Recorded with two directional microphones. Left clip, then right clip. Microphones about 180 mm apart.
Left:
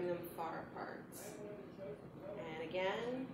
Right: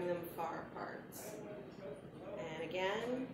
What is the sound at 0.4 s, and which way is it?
Speech, 5° right (ahead or behind).